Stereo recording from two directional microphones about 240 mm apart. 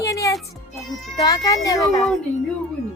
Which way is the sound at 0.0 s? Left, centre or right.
Centre.